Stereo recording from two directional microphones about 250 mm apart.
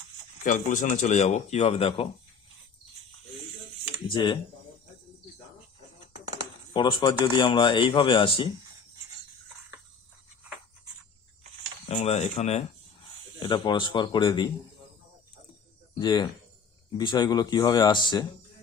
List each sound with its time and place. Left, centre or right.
0.4 s speech: left
4.1 s speech: centre
6.7 s speech: centre
11.9 s speech: left
16.0 s speech: centre